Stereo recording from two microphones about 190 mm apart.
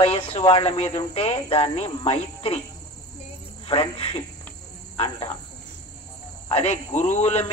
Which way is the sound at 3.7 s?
30° left (ahead or behind).